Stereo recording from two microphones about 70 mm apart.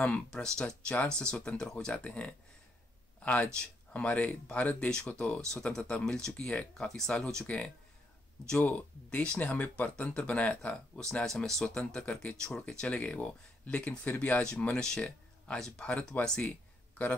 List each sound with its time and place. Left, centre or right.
0.3 s speech: centre
3.2 s a sound: centre
3.9 s speech: centre